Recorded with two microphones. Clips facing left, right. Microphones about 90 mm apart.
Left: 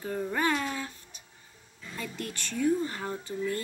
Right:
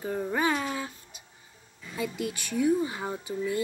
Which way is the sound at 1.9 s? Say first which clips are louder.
Right 6 dB; 10° right (ahead or behind).